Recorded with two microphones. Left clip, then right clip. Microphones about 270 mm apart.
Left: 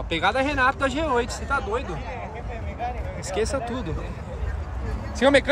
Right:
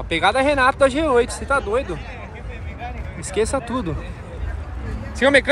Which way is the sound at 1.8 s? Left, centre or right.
Left.